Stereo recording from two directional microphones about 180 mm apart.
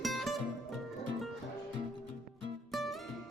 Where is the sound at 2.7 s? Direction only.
Centre (ahead or behind).